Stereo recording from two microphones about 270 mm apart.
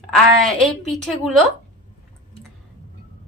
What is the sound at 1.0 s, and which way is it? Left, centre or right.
Speech, centre.